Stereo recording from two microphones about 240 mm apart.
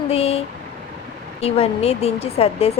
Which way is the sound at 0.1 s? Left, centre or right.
Left.